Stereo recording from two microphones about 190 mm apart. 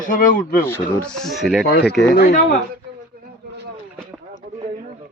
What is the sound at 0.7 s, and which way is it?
Speech, 10° left (ahead or behind).